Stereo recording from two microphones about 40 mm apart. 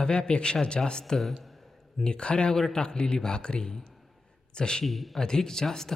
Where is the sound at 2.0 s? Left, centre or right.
Left.